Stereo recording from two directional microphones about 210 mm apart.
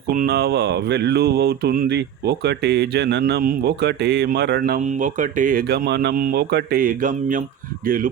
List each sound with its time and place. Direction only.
0.1 s mantra: 45° right (ahead or behind)
7.9 s speech: 40° right (ahead or behind)